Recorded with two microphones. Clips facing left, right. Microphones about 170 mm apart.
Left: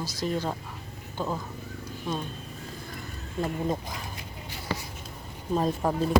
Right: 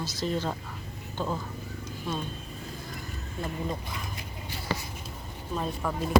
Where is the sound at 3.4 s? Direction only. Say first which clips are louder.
Left 5 dB; 40° left (ahead or behind).